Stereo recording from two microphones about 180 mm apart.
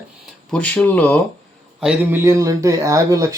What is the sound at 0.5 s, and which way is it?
Speech, 5° left (ahead or behind).